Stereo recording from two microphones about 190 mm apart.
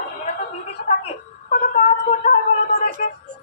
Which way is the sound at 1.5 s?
35° left (ahead or behind).